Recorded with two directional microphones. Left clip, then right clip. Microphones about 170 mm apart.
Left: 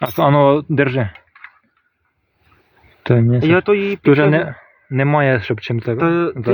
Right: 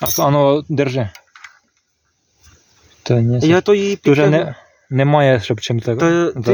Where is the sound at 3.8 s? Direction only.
Centre (ahead or behind).